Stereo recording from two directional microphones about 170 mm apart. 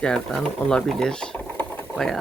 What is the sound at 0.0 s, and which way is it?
Speech, 5° left (ahead or behind).